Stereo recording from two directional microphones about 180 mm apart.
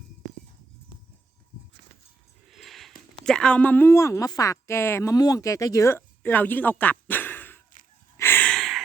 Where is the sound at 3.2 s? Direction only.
5° left (ahead or behind).